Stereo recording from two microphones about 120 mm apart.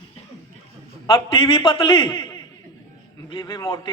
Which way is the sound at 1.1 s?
45° left (ahead or behind).